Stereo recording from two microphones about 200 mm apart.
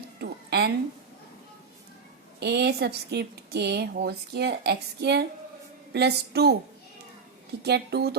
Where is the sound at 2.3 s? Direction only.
55° right (ahead or behind).